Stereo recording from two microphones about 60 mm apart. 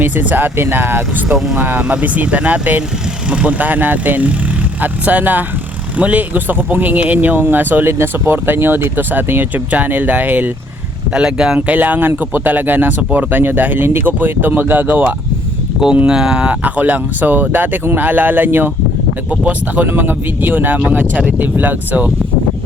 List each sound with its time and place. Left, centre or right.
0.0 s speech: right
11.1 s speech: centre
11.6 s speech: right
16.0 s speech: centre; by 22.1 s right